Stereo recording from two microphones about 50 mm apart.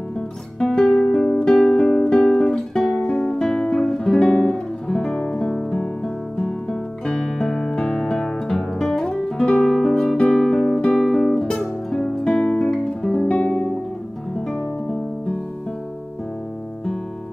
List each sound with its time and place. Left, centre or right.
0.6 s music: centre
3.1 s guitar: centre
5.4 s music: centre
11.0 s guitar: centre
11.9 s music: centre
13.0 s guitar: centre
13.3 s guitar: left
14.5 s music: centre